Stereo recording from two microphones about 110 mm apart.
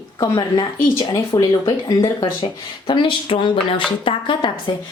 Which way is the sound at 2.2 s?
50° left (ahead or behind).